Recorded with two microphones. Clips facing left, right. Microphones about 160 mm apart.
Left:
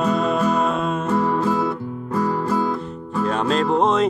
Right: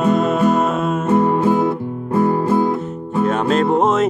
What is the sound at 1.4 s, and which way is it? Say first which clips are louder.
Music: right 5 dB; 20° right (ahead or behind).